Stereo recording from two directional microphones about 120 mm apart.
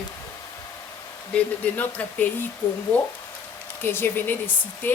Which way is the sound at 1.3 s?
15° left (ahead or behind).